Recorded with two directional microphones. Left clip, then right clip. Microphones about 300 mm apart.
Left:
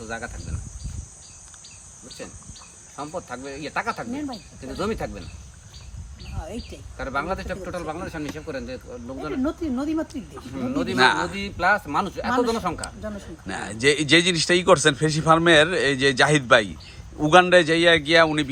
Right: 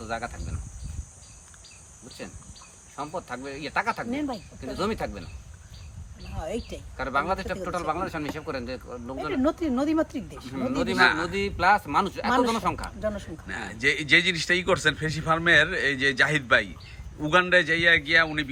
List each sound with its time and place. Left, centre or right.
0.0 s speech: centre
2.9 s a man's voice: centre
6.9 s a man's voice: centre
9.4 s speech: right
10.5 s a man's voice: centre
13.0 s speech: right
13.5 s a man's voice: centre